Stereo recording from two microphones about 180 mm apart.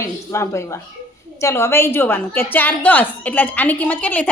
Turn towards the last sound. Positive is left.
turn(degrees=5)  # may be behind; listen again after turning